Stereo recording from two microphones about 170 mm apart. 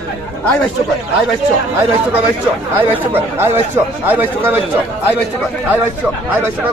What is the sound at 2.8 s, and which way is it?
Speech, 10° right (ahead or behind).